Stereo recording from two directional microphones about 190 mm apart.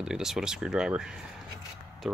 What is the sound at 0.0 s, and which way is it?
Speech, 5° right (ahead or behind).